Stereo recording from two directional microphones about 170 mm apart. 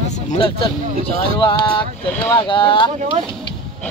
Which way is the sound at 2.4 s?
30° left (ahead or behind).